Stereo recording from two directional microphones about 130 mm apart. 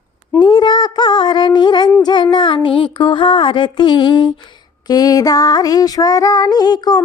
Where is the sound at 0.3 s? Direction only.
35° left (ahead or behind).